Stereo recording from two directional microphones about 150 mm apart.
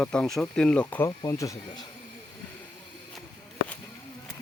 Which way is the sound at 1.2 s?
20° left (ahead or behind).